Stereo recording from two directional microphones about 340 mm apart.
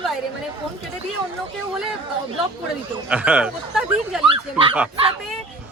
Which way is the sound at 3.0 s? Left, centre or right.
Centre.